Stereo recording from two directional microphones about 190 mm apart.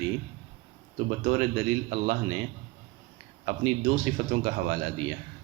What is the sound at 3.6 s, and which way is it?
Speech, 35° right (ahead or behind).